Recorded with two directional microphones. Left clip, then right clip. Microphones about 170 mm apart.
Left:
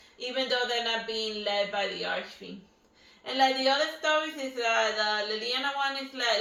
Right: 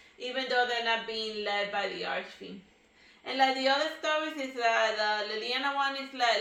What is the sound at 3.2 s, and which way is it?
A woman's voice, 15° right (ahead or behind).